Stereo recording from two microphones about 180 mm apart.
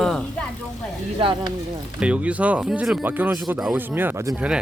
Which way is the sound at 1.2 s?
25° right (ahead or behind).